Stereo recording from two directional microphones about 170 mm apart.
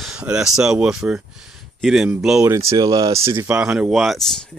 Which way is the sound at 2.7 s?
25° right (ahead or behind).